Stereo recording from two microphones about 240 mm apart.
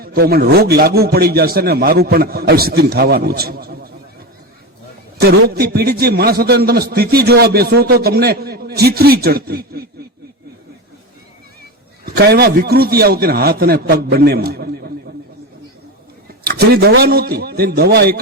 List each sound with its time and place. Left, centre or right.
0.0 s a man's voice: right
5.2 s a man's voice: right
12.0 s a man's voice: right
16.5 s a man's voice: right